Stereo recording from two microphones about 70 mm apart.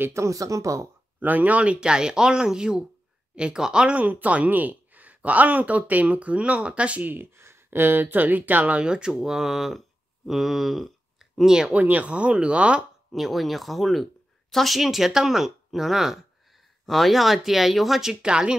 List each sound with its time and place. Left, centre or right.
0.0 s speech: right
1.2 s speech: right; by 11.7 s centre
11.7 s speech: right
13.1 s speech: centre